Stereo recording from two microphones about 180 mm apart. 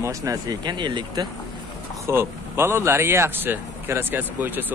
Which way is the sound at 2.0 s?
15° right (ahead or behind).